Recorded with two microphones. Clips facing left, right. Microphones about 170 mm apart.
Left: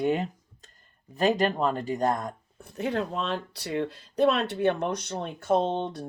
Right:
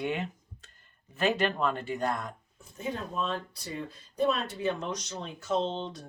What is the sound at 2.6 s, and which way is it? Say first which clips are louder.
Speech: left 7 dB; 70° left (ahead or behind).